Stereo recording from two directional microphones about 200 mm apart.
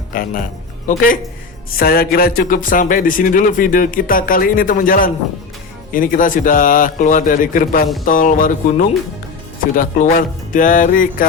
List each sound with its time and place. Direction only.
0.1 s a man's voice: 45° left (ahead or behind)
9.7 s speech: 45° left (ahead or behind)